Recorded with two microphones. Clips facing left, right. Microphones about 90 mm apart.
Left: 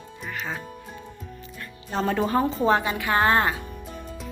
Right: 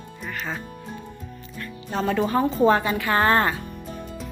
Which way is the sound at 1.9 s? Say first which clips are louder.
Even; 35° left (ahead or behind).